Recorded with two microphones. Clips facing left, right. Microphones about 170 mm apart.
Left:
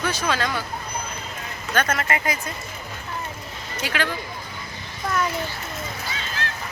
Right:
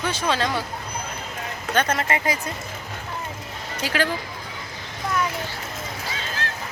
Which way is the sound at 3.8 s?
35° right (ahead or behind).